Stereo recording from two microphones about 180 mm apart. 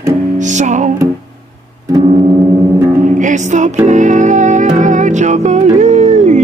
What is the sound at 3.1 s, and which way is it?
Music, 45° right (ahead or behind).